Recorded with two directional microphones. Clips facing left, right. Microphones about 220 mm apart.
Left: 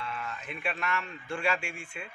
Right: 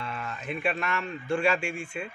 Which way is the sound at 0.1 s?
40° right (ahead or behind).